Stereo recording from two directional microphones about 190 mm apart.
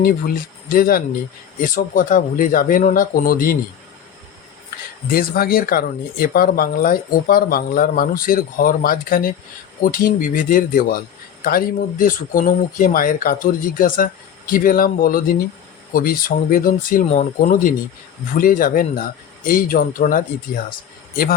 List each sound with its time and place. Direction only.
0.7 s speech: 50° left (ahead or behind)
5.1 s speech: 50° left (ahead or behind)